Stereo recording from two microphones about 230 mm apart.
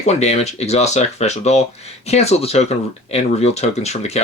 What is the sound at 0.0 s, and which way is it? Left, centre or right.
Speech, left.